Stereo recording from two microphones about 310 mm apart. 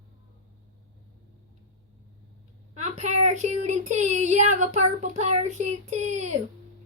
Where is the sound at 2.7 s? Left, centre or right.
Right.